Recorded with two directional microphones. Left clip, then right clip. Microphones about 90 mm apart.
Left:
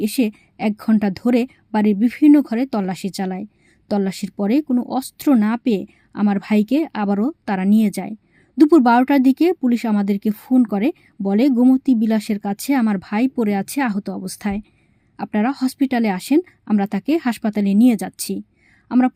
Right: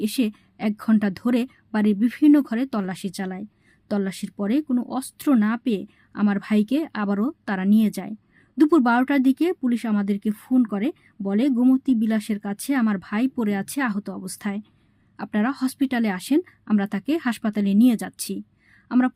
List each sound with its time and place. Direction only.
0.0 s a woman's voice: 30° left (ahead or behind)